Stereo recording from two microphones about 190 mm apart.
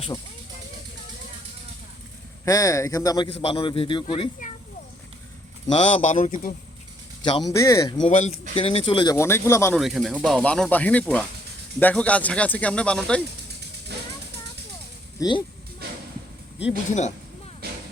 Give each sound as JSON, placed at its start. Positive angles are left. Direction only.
{"t": 2.4, "sound": "speech", "side_deg": 15}
{"t": 3.2, "sound": "a man's voice", "side_deg": 30}
{"t": 5.6, "sound": "speech", "side_deg": 35}
{"t": 7.3, "sound": "a man's voice", "side_deg": 25}
{"t": 7.5, "sound": "speech", "side_deg": 15}
{"t": 8.0, "sound": "a man's voice", "side_deg": 35}
{"t": 9.1, "sound": "speech", "side_deg": 15}
{"t": 9.7, "sound": "speech", "side_deg": 0}
{"t": 15.2, "sound": "a man's voice", "side_deg": 25}